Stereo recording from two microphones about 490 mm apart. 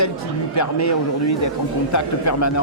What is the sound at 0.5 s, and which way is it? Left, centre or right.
Speech, left.